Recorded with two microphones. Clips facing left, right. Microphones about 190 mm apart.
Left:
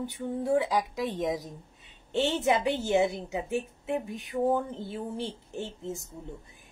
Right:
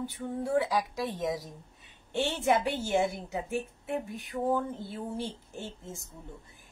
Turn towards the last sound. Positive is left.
turn(degrees=20)  # may be behind; listen again after turning